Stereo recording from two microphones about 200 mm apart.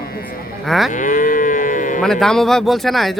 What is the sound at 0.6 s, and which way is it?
Moo, centre (ahead or behind).